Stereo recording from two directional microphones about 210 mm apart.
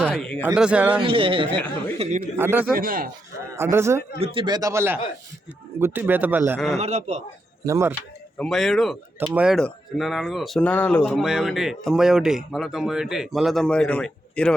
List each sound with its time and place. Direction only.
0.4 s speech: 5° right (ahead or behind)
1.0 s a man's voice: 25° right (ahead or behind)
2.2 s a man's voice: 10° right (ahead or behind)
2.7 s speech: 40° right (ahead or behind)
3.5 s a man's voice: 10° right (ahead or behind)
4.2 s a man's voice: 25° right (ahead or behind); by 6.7 s 10° right (ahead or behind)
6.7 s a man's voice: 30° right (ahead or behind)
7.6 s a man's voice: 15° right (ahead or behind)
8.4 s speech: centre (ahead or behind)
11.1 s speech: 5° right (ahead or behind)